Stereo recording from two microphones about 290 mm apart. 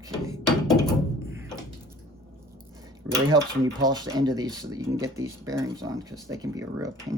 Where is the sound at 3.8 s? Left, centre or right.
Centre.